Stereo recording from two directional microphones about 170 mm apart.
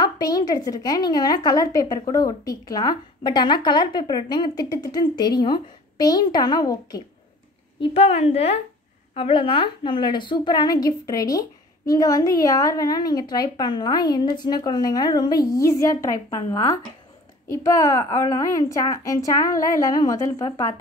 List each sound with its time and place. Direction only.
0.0 s a woman's voice: 25° left (ahead or behind)
7.8 s a woman's voice: 35° left (ahead or behind); by 20.7 s 20° left (ahead or behind)